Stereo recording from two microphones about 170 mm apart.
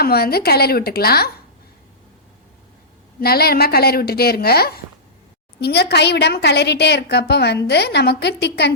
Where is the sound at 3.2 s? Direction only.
65° left (ahead or behind).